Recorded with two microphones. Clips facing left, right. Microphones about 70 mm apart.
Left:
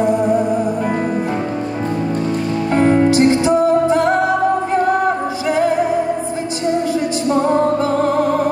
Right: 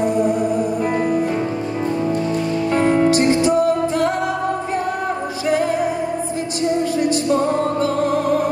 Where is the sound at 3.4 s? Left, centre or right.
Left.